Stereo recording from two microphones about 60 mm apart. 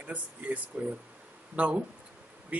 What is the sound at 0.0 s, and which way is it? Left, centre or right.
Speech, right.